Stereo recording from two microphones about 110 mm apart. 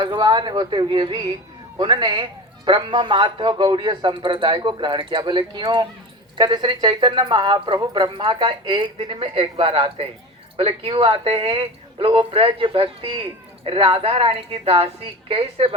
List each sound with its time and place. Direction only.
0.0 s speech: 40° right (ahead or behind); by 15.7 s 60° right (ahead or behind)